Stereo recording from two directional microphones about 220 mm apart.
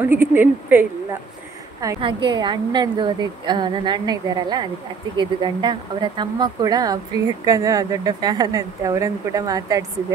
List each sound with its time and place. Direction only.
0.0 s speech: 10° right (ahead or behind)
1.8 s a woman's voice: 20° right (ahead or behind)